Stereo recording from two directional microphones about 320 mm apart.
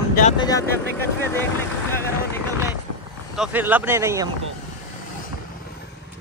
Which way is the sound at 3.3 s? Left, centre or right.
Centre.